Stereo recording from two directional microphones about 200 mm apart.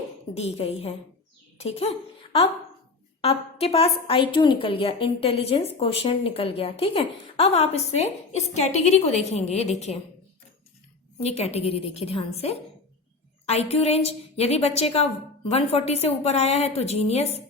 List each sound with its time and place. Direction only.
0.3 s a woman's voice: 30° left (ahead or behind)
11.2 s a woman's voice: 30° left (ahead or behind)